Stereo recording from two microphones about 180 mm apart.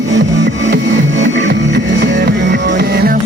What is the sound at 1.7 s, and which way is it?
Music, 75° right (ahead or behind).